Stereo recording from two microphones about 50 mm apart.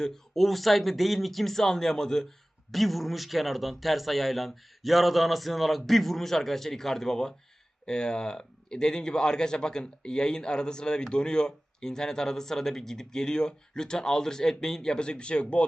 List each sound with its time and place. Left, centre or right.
0.0 s a man's voice: centre; by 15.6 s left